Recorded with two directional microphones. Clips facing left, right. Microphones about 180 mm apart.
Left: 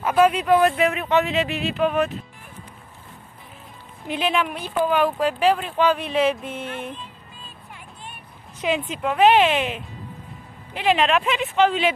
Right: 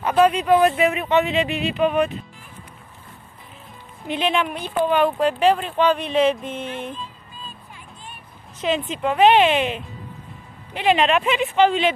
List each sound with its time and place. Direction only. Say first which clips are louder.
0.0 s speech: right 1 dB; 5° left (ahead or behind)
4.1 s speech: right 1 dB; 5° left (ahead or behind)
7.7 s a sound: left 1 dB; 70° left (ahead or behind)
8.5 s speech: right 1 dB; 10° left (ahead or behind)